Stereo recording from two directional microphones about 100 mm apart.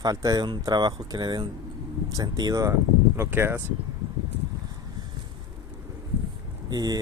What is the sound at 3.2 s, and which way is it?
Speech, 25° right (ahead or behind).